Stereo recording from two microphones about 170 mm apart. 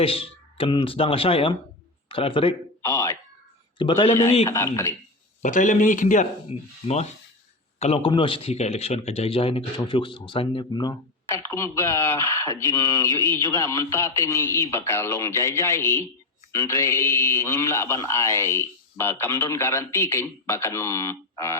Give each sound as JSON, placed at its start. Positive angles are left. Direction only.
{"t": 0.0, "sound": "speech", "side_deg": 35}
{"t": 2.8, "sound": "speech", "side_deg": 15}
{"t": 3.8, "sound": "a man's voice", "side_deg": 30}
{"t": 4.1, "sound": "a man's voice", "side_deg": 15}
{"t": 5.4, "sound": "speech", "side_deg": 50}
{"t": 11.5, "sound": "a man's voice", "side_deg": 15}